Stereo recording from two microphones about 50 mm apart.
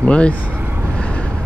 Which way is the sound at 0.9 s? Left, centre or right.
Left.